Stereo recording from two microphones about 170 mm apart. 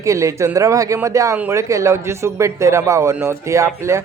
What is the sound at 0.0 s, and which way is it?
Speech, 15° right (ahead or behind).